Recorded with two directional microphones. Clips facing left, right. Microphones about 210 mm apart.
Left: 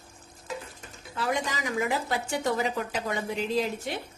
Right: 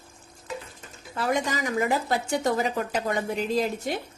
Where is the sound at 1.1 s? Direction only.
50° right (ahead or behind).